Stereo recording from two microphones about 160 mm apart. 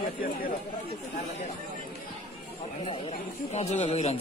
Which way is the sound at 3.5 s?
45° left (ahead or behind).